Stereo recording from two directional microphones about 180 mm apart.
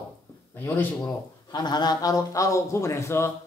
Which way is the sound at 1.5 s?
25° left (ahead or behind).